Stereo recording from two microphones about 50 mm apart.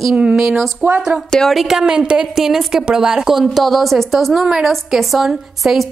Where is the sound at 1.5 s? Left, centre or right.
Centre.